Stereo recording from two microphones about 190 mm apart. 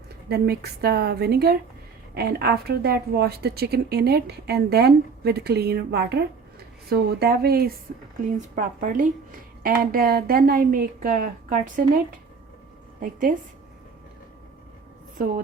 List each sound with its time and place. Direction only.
0.3 s a woman's voice: 55° right (ahead or behind)
13.0 s a woman's voice: 45° right (ahead or behind)